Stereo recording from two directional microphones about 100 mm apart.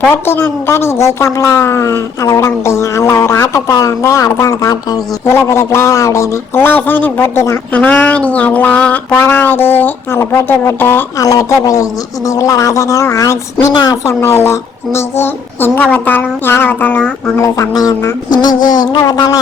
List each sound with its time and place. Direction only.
0.1 s a woman's voice: 20° left (ahead or behind); by 4.9 s 35° left (ahead or behind)
5.2 s a woman's voice: 25° left (ahead or behind)
11.2 s a woman's voice: 35° left (ahead or behind); by 17.1 s 15° left (ahead or behind)
17.4 s a woman's voice: 35° left (ahead or behind)